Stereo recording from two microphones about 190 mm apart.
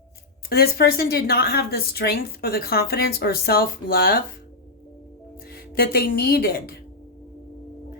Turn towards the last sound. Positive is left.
turn(degrees=55)  # may be behind; listen again after turning